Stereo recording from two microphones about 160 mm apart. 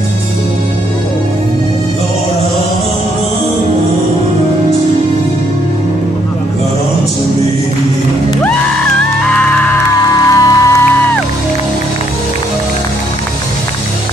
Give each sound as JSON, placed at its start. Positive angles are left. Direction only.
{"t": 9.3, "sound": "music", "side_deg": 10}
{"t": 10.0, "sound": "music", "side_deg": 20}